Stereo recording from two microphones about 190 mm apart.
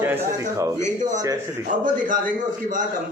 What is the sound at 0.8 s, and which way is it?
Speech, 40° right (ahead or behind).